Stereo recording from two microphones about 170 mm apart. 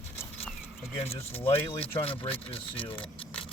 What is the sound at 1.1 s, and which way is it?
Speech, 35° left (ahead or behind).